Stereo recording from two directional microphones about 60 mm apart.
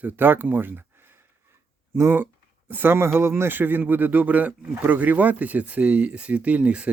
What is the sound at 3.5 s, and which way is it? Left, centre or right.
Speech, right.